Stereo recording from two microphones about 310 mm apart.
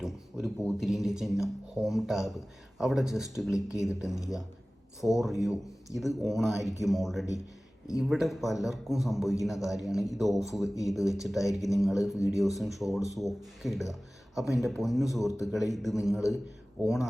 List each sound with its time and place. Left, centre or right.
0.0 s speech: centre